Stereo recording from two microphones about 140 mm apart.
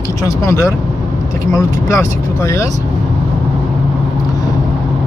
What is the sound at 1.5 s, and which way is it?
Speech, 20° left (ahead or behind).